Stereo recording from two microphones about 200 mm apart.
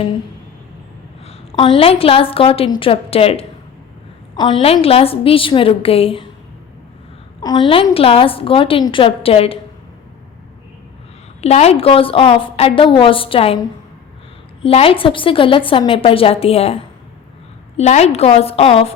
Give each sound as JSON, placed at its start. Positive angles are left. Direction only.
{"t": 1.5, "sound": "a woman's voice", "side_deg": 30}
{"t": 7.4, "sound": "a woman's voice", "side_deg": 25}
{"t": 11.3, "sound": "a woman's voice", "side_deg": 30}
{"t": 17.7, "sound": "a woman's voice", "side_deg": 35}